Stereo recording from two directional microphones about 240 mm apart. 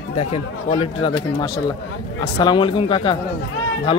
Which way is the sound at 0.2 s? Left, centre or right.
Left.